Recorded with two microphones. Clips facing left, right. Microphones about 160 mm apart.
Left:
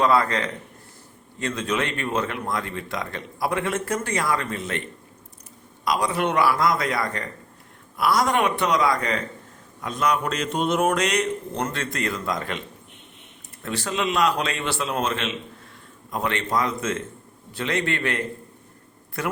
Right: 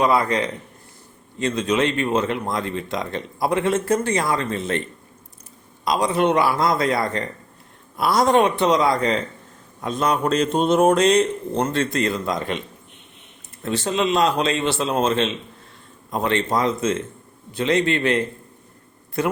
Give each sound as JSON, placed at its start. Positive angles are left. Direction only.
{"t": 0.0, "sound": "a man's voice", "side_deg": -15}
{"t": 5.8, "sound": "speech", "side_deg": -25}